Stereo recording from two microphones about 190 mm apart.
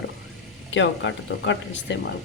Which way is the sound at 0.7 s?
75° left (ahead or behind).